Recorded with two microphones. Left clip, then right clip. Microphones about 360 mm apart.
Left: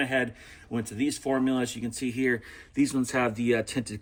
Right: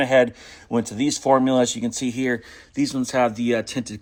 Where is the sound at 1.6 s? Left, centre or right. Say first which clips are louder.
Right 8 dB; centre.